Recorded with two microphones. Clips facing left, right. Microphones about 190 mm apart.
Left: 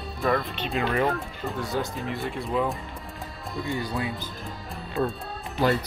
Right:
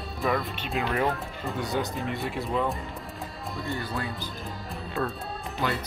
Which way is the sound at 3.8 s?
15° left (ahead or behind).